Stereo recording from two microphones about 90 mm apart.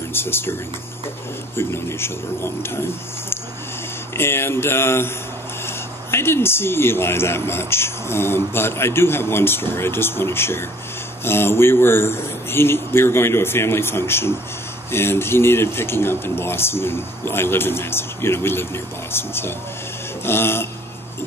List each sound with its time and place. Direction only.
0.1 s a man's voice: 25° left (ahead or behind)
1.6 s a man's voice: 30° left (ahead or behind)
4.2 s a man's voice: 25° left (ahead or behind)